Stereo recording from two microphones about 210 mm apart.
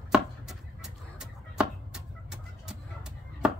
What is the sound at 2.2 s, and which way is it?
Fowl, 5° right (ahead or behind).